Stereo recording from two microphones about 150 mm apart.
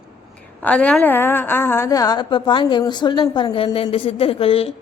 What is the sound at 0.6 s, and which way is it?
A woman's voice, 10° left (ahead or behind).